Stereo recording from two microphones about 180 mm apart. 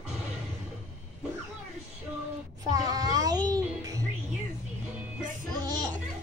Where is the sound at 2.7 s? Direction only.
20° right (ahead or behind).